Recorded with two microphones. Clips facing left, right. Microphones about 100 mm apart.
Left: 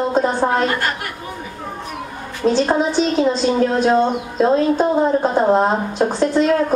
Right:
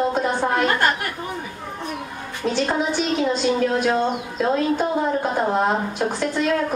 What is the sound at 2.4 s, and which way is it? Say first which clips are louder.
A woman's voice: left 6 dB; 30° left (ahead or behind).